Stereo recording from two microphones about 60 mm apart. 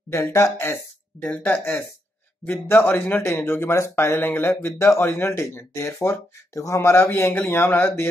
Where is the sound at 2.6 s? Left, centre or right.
Left.